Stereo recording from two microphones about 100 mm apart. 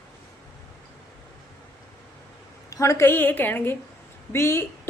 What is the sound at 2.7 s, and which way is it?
A woman's voice, 30° left (ahead or behind).